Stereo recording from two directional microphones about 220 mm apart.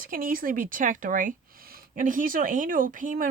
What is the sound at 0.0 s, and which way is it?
Speech, 40° right (ahead or behind).